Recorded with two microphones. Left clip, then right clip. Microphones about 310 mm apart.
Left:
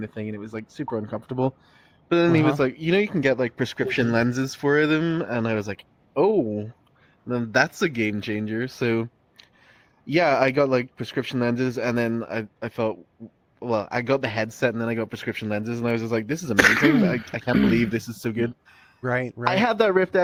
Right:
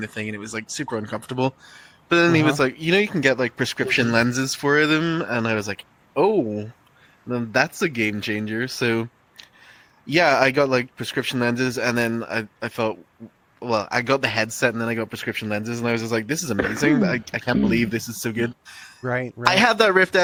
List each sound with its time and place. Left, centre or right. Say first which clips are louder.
0.0 s speech: right 4 dB; right; by 6.7 s centre
7.3 s speech: even; centre
16.6 s speech: left 11 dB; left
17.0 s speech: right 1 dB; centre
18.6 s a sound: right 10 dB; right
19.0 s speech: even; centre
19.5 s speech: right 4 dB; right
20.0 s speech: right 3 dB; right